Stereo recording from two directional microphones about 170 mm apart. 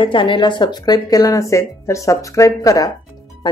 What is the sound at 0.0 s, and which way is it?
Speech, 30° left (ahead or behind).